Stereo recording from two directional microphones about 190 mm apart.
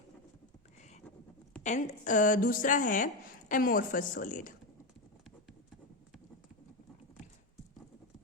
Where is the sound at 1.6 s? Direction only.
40° left (ahead or behind).